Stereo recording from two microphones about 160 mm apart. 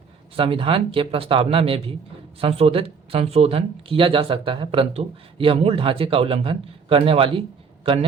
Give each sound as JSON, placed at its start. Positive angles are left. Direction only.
{"t": 0.3, "sound": "speech", "side_deg": -35}